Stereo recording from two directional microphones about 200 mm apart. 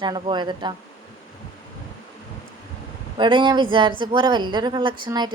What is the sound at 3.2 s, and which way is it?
Speech, 25° right (ahead or behind).